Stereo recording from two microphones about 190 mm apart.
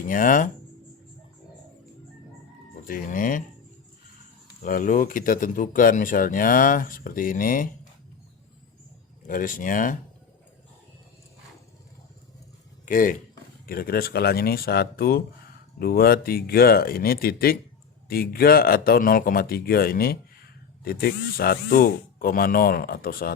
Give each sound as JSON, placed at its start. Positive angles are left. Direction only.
{"t": 0.0, "sound": "speech", "side_deg": 45}
{"t": 2.8, "sound": "speech", "side_deg": 45}
{"t": 4.6, "sound": "speech", "side_deg": 45}
{"t": 9.2, "sound": "speech", "side_deg": 45}
{"t": 12.8, "sound": "speech", "side_deg": 45}